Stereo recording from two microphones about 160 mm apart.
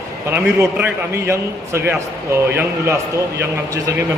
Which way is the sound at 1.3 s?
15° right (ahead or behind).